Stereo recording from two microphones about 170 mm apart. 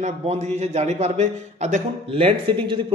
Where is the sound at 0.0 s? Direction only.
40° right (ahead or behind).